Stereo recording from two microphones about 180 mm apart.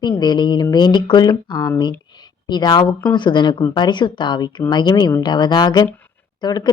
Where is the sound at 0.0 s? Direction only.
25° left (ahead or behind).